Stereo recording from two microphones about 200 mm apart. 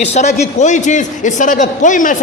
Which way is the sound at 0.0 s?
35° left (ahead or behind).